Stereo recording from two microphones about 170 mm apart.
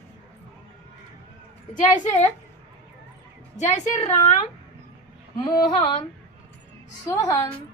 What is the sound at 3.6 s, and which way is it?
Speech, 45° left (ahead or behind).